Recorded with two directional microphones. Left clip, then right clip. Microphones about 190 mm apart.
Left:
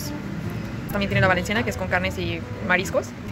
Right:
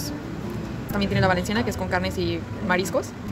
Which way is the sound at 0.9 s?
10° right (ahead or behind).